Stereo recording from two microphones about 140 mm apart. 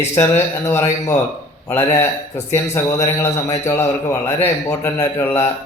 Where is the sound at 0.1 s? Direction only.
20° left (ahead or behind).